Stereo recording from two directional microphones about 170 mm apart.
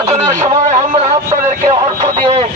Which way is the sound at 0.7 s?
35° right (ahead or behind).